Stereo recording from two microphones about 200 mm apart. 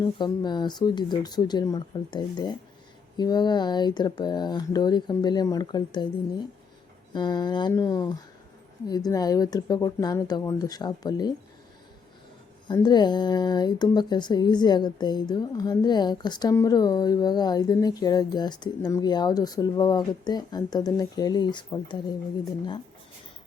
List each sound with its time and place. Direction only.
0.0 s speech: 20° left (ahead or behind)
7.1 s speech: 20° left (ahead or behind)
12.6 s speech: 20° left (ahead or behind)